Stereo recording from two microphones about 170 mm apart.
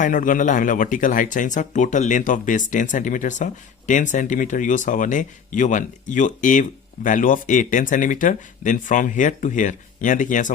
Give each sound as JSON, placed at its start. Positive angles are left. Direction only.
{"t": 0.0, "sound": "speech", "side_deg": 50}